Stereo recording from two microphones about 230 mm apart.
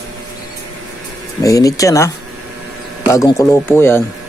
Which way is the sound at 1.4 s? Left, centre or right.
Centre.